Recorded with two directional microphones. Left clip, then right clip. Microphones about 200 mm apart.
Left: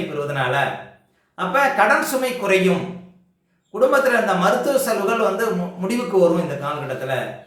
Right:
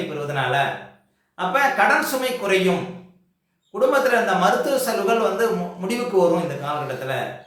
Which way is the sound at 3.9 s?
5° left (ahead or behind).